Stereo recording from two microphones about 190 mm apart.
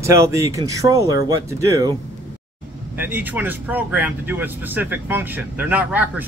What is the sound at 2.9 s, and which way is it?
Speech, 10° right (ahead or behind).